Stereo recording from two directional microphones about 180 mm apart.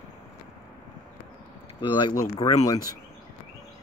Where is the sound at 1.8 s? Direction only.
25° left (ahead or behind).